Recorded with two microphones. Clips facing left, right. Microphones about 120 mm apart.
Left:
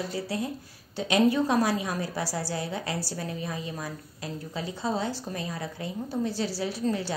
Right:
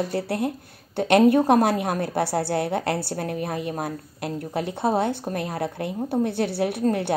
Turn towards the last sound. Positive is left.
turn(degrees=-60)  # may be behind; listen again after turning